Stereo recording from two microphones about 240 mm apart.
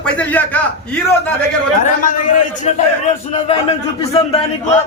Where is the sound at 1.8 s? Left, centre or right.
Left.